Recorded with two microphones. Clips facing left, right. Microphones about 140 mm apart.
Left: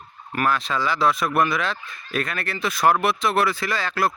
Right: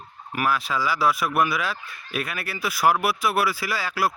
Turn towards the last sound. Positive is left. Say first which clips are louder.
# left 2 dB
turn(degrees=-5)  # may be behind; listen again after turning